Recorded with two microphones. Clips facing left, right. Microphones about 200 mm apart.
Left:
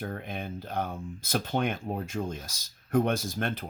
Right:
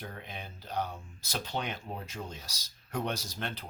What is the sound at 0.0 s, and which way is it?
Speech, 50° left (ahead or behind).